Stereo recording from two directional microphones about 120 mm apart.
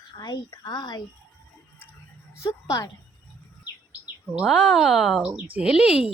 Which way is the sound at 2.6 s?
25° left (ahead or behind).